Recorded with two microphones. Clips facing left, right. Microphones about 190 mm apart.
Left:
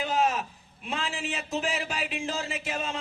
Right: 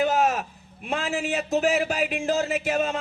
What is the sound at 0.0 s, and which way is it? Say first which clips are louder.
A man's voice: right 4 dB; 45° right (ahead or behind).